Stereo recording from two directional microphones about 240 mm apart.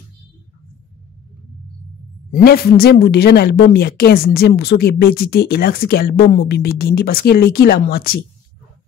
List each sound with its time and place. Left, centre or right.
2.3 s speech: left